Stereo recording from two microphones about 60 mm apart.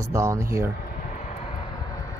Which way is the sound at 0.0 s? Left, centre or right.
Right.